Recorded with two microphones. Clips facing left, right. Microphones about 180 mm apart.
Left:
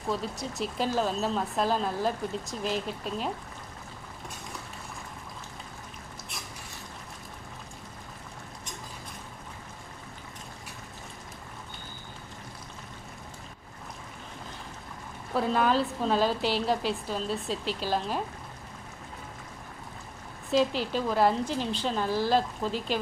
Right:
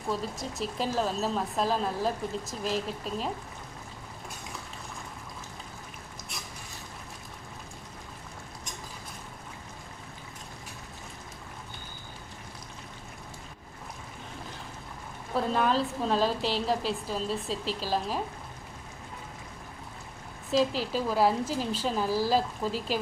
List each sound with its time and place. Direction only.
0.1 s a woman's voice: centre (ahead or behind)
15.4 s a woman's voice: centre (ahead or behind)
20.5 s a woman's voice: centre (ahead or behind)